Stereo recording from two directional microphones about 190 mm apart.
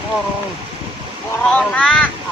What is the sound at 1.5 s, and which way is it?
Speech, 5° left (ahead or behind).